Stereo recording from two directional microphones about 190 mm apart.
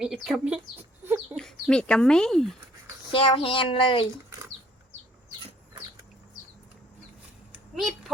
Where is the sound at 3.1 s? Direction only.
30° left (ahead or behind).